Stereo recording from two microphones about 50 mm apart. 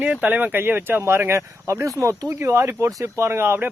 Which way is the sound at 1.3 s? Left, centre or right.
Right.